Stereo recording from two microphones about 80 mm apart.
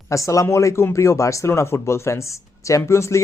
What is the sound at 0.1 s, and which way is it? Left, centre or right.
Speech, left.